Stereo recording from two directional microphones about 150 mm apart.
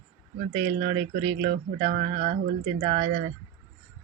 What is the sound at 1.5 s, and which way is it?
Speech, 55° right (ahead or behind).